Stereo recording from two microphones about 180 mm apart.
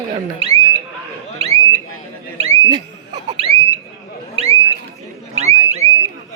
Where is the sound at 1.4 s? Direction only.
35° right (ahead or behind).